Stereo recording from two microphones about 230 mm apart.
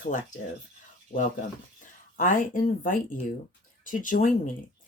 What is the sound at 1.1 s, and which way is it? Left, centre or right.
Speech, left.